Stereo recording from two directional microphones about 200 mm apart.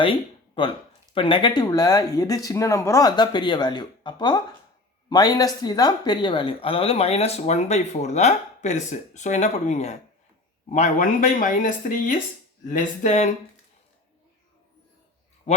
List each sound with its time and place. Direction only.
1.1 s speech: 25° left (ahead or behind)